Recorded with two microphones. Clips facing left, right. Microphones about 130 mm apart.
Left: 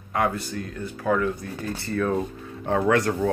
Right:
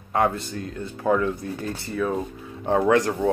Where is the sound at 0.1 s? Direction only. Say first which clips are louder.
Right 2 dB; 25° right (ahead or behind).